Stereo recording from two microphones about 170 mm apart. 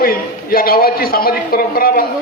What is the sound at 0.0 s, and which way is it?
A man's voice, 60° left (ahead or behind).